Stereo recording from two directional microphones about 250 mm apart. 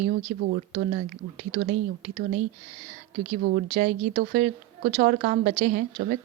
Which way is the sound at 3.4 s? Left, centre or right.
Right.